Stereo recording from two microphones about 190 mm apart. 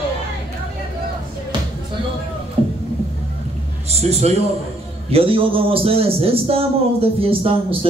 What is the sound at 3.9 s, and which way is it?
A man's voice, 35° right (ahead or behind).